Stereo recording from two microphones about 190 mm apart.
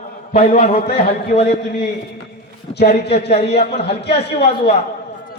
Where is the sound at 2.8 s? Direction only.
60° left (ahead or behind).